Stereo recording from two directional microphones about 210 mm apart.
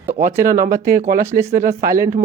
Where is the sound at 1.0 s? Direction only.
45° right (ahead or behind).